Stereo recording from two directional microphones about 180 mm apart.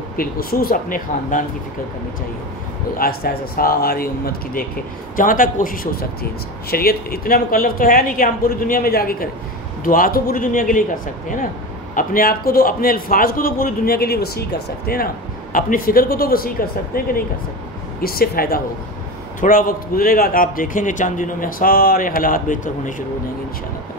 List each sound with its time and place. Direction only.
0.2 s a man's voice: 55° left (ahead or behind)
3.0 s a man's voice: 55° left (ahead or behind)
11.9 s a man's voice: 50° left (ahead or behind)